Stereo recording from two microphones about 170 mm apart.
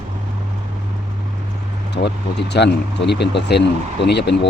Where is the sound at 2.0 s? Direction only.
80° left.